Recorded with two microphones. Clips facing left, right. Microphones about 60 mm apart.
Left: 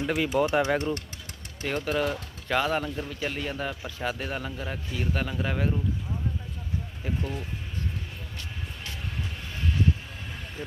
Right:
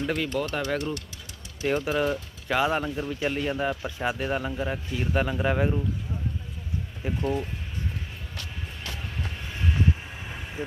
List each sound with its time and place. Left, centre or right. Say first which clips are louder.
0.0 s speech: left 3 dB; centre
1.6 s speech: right 3 dB; centre
7.0 s speech: right 6 dB; centre
9.5 s vehicle: right 1 dB; centre